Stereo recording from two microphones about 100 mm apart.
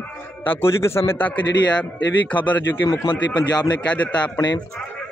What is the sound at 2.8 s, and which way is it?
Speech, 45° left (ahead or behind).